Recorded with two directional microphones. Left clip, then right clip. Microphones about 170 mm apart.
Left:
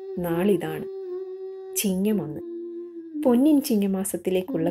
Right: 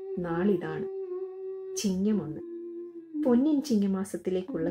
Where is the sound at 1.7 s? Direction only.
25° left (ahead or behind).